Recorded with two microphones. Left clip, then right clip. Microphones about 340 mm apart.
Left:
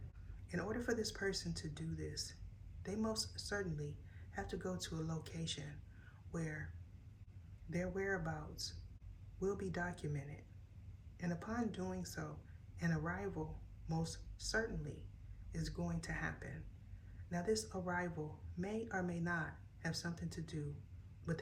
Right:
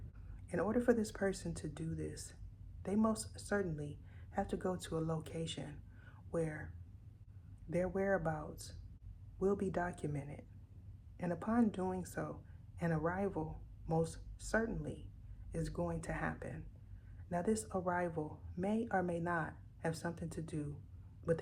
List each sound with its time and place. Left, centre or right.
0.4 s speech: centre
7.7 s speech: centre